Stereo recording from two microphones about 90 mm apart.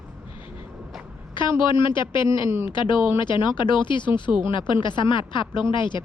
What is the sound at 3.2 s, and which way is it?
Speech, 60° left (ahead or behind).